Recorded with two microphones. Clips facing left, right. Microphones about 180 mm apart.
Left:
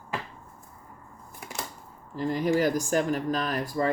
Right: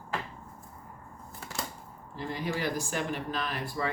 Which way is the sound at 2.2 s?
40° left (ahead or behind).